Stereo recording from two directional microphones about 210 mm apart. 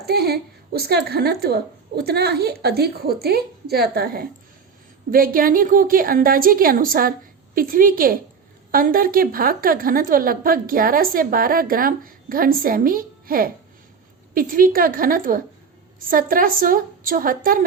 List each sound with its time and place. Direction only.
0.0 s a woman's voice: 50° right (ahead or behind)